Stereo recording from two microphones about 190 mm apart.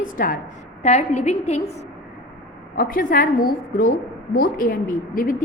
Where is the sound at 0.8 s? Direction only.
35° left (ahead or behind).